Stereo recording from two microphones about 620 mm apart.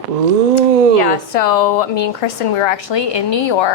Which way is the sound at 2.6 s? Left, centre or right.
Left.